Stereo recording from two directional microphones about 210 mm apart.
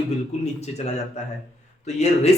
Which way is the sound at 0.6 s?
30° left (ahead or behind).